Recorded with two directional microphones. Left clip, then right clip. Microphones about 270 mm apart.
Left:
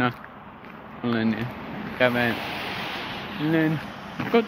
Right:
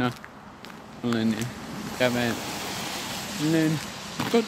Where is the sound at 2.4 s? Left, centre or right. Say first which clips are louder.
Left 2 dB; right.